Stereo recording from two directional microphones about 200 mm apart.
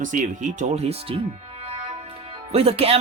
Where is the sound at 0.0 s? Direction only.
40° right (ahead or behind).